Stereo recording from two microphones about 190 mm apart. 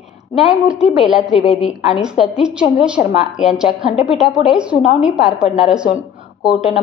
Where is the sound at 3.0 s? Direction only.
40° left (ahead or behind).